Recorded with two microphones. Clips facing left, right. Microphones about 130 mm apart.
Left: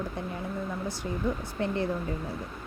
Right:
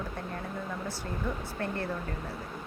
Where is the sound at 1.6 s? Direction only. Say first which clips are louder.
Left 5 dB; 20° left (ahead or behind).